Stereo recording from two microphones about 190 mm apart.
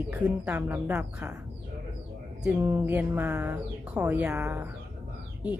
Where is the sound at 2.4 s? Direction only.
10° right (ahead or behind).